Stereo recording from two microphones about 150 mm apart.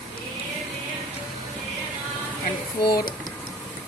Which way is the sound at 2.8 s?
30° left (ahead or behind).